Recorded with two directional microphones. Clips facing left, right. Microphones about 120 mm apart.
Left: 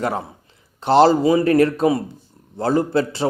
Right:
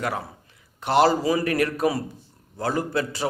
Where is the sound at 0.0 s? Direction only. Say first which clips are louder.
Left 5 dB; 30° left (ahead or behind).